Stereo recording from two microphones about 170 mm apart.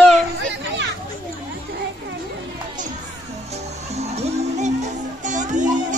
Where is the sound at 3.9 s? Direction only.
40° right (ahead or behind).